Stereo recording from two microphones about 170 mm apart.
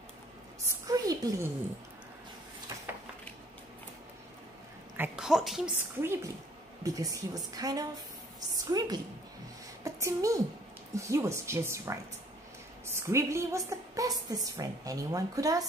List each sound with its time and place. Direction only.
0.8 s a sound: 20° right (ahead or behind)
4.9 s a woman's voice: 10° right (ahead or behind)
5.9 s a woman's voice: 15° right (ahead or behind)